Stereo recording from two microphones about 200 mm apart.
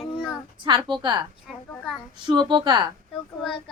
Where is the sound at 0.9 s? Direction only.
20° right (ahead or behind).